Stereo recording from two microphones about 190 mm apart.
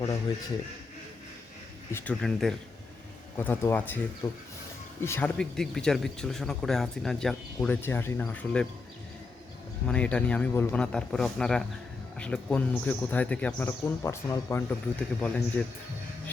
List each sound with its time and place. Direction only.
1.9 s speech: 10° left (ahead or behind)
2.2 s speech: centre (ahead or behind)
9.8 s speech: 5° left (ahead or behind)